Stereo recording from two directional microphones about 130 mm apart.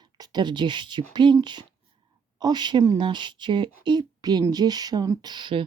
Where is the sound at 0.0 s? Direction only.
35° right (ahead or behind).